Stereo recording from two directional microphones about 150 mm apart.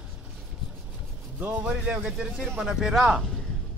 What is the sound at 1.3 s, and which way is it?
Music, 10° right (ahead or behind).